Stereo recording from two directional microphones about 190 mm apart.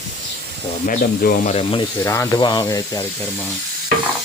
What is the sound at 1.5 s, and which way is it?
Speech, 30° left (ahead or behind).